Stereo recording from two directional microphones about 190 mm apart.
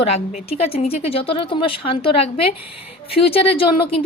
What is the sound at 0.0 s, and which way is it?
A woman's voice, 35° left (ahead or behind).